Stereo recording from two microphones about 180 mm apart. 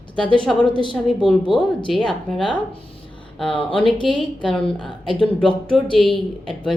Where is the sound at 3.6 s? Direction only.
30° left (ahead or behind).